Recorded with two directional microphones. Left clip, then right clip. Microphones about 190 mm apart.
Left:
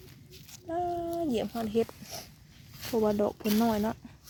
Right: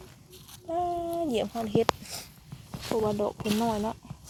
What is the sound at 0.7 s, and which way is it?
Speech, 15° left (ahead or behind).